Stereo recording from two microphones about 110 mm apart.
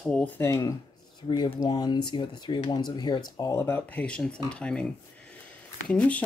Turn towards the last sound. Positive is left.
turn(degrees=10)  # may be behind; listen again after turning